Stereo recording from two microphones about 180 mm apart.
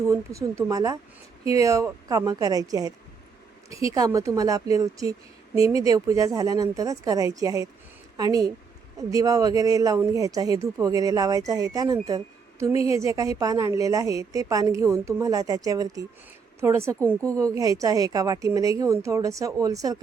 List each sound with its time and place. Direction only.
0.1 s a woman's voice: 15° right (ahead or behind)